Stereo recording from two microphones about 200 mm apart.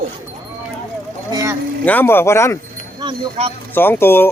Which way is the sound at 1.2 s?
15° right (ahead or behind).